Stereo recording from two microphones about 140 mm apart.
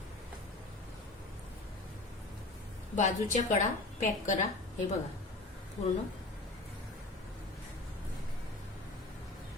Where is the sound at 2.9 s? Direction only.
60° left (ahead or behind).